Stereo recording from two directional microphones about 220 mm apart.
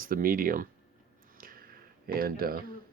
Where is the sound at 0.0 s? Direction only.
40° right (ahead or behind).